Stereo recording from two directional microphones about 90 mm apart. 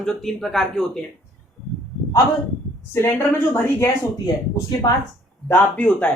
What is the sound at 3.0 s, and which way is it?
Speech, 30° left (ahead or behind).